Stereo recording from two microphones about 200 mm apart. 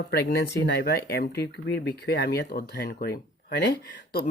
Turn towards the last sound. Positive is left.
turn(degrees=60)  # may be behind; listen again after turning